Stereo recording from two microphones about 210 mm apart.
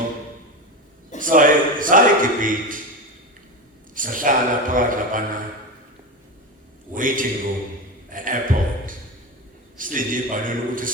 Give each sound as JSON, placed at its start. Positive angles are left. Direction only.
{"t": 1.2, "sound": "a man's voice", "side_deg": -40}
{"t": 3.9, "sound": "a man's voice", "side_deg": -40}
{"t": 6.9, "sound": "a man's voice", "side_deg": -40}
{"t": 8.1, "sound": "a sound", "side_deg": -40}
{"t": 9.7, "sound": "a man's voice", "side_deg": -40}